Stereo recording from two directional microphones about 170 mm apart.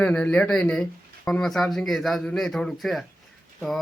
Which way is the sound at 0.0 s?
10° left (ahead or behind).